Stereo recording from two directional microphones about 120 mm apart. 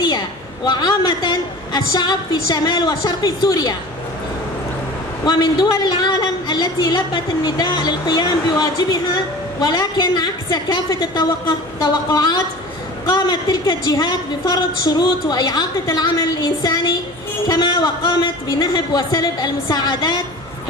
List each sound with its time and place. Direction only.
0.7 s a woman's voice: 35° left (ahead or behind)
5.2 s a woman's voice: 35° left (ahead or behind)